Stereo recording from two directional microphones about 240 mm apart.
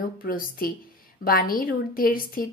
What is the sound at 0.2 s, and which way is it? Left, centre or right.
A woman's voice, left.